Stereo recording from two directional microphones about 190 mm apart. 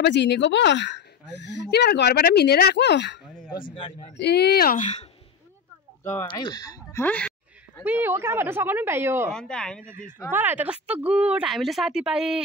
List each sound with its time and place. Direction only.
0.0 s speech: 60° left (ahead or behind); by 5.0 s 40° left (ahead or behind)
6.2 s speech: 20° left (ahead or behind)
7.8 s speech: 10° right (ahead or behind)
9.3 s speech: 5° left (ahead or behind)
10.3 s speech: 10° right (ahead or behind)